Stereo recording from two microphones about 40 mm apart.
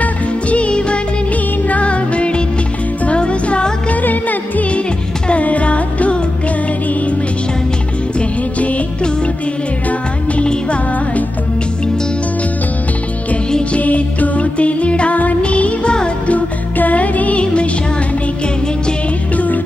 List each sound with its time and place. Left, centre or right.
0.0 s music: left
3.9 s music: left
5.3 s music: left
8.2 s music: left
10.4 s music: left
13.7 s music: left
16.3 s music: left
19.3 s music: left